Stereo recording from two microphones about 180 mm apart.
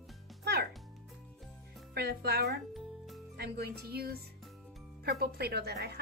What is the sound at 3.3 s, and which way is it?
A woman's voice, 65° right (ahead or behind).